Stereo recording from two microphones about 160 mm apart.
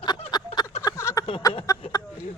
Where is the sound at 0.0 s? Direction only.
25° left (ahead or behind).